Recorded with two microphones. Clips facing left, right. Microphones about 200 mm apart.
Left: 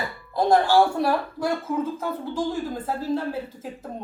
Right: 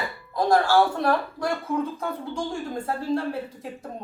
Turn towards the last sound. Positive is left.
turn(degrees=0)  # may be behind; listen again after turning